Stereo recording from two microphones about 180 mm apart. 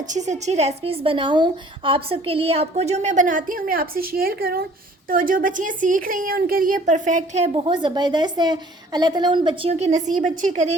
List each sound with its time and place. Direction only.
0.0 s a woman's voice: 40° right (ahead or behind)